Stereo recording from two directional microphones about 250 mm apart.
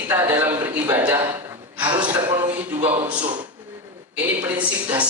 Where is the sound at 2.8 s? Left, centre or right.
Right.